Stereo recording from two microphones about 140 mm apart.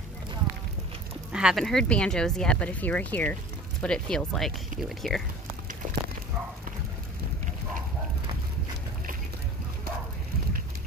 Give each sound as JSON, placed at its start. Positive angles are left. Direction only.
{"t": 1.3, "sound": "speech", "side_deg": -5}